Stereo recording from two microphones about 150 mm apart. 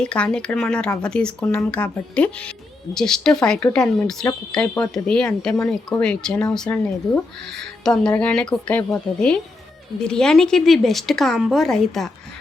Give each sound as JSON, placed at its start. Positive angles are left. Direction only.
{"t": 0.0, "sound": "speech", "side_deg": 5}
{"t": 10.0, "sound": "speech", "side_deg": 5}